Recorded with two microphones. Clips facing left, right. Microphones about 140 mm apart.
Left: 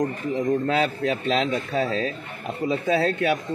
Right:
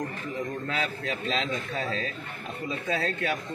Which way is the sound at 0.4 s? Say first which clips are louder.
Left 10 dB; 25° left (ahead or behind).